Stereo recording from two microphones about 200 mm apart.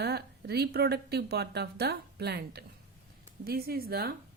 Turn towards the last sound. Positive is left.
turn(degrees=-50)  # may be behind; listen again after turning